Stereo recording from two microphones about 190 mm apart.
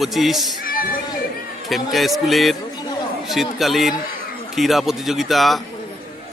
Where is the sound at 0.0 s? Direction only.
Centre (ahead or behind).